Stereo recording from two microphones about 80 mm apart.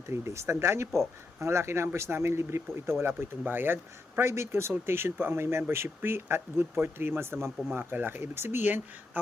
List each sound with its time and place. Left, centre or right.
0.1 s speech: right